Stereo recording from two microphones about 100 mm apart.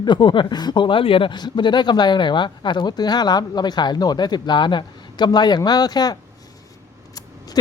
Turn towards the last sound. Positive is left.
turn(degrees=40)  # may be behind; listen again after turning